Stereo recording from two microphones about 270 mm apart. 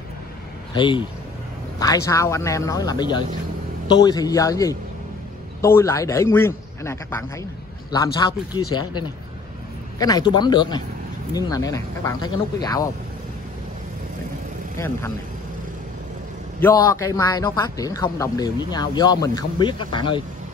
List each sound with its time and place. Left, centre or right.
0.7 s a man's voice: centre
16.5 s a man's voice: centre